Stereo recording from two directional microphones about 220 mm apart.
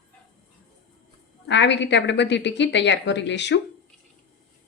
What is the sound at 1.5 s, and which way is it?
A woman's voice, 55° left (ahead or behind).